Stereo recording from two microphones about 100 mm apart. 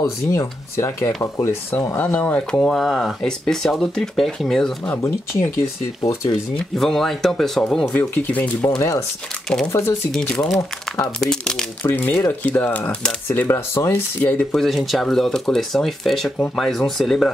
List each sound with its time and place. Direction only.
0.0 s speech: 30° left (ahead or behind); by 4.9 s 5° left (ahead or behind)
4.9 s speech: 25° left (ahead or behind)
6.5 s speech: 5° left (ahead or behind)
7.9 s speech: 20° left (ahead or behind)
8.5 s speech: 30° left (ahead or behind)
10.1 s speech: 10° left (ahead or behind)
11.8 s speech: 20° left (ahead or behind)
14.5 s speech: centre (ahead or behind)